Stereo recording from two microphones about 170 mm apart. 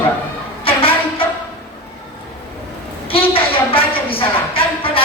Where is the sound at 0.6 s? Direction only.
30° left (ahead or behind).